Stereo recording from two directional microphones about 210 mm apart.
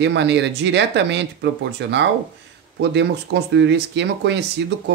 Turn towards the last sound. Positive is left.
turn(degrees=-55)  # may be behind; listen again after turning